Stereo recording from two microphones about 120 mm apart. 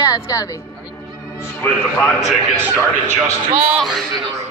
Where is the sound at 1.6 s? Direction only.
10° left (ahead or behind).